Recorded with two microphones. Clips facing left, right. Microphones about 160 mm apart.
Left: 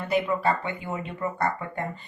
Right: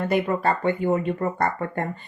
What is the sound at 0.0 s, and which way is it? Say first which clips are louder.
A woman's voice: right 2 dB; 55° right (ahead or behind).